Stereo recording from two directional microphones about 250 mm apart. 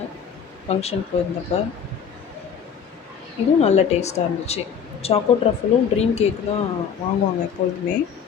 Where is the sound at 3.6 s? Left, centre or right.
Left.